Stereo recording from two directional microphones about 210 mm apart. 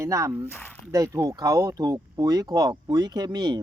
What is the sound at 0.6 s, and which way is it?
Speech, 10° left (ahead or behind).